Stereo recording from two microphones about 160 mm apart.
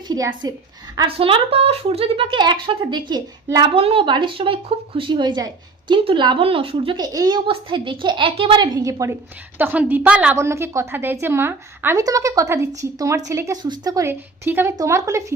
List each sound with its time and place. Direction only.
0.4 s a woman's voice: 25° right (ahead or behind)
0.9 s a woman's voice: 35° right (ahead or behind); by 15.2 s 20° right (ahead or behind)